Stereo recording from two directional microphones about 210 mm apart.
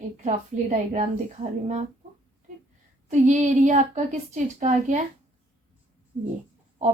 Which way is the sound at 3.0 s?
35° right (ahead or behind).